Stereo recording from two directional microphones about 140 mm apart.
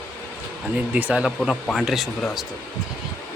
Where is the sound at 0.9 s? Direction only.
10° right (ahead or behind).